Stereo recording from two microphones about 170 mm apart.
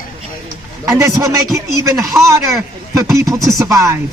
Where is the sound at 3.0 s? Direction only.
20° right (ahead or behind).